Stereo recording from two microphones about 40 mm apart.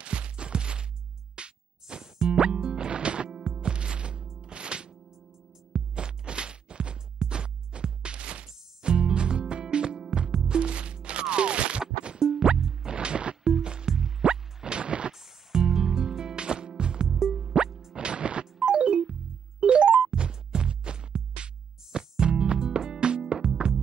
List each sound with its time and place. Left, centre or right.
0.0 s music: right
3.3 s music: centre
12.5 s music: centre
12.9 s music: right
15.1 s music: centre
16.3 s music: right
17.1 s music: centre
17.9 s music: right
18.4 s a sound: right
19.6 s music: right
23.5 s music: centre